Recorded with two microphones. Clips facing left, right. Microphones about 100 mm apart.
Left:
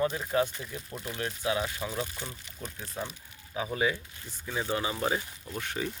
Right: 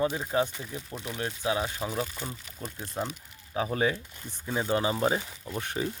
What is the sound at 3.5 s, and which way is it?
Speech, 40° right (ahead or behind).